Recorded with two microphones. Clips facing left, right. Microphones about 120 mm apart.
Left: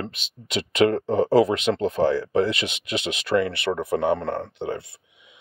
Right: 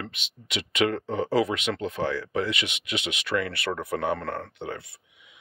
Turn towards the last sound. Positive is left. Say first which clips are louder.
# left 6 dB
turn(degrees=25)  # may be behind; listen again after turning